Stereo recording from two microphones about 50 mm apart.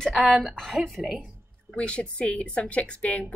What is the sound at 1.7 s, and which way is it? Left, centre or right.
A woman's voice, left.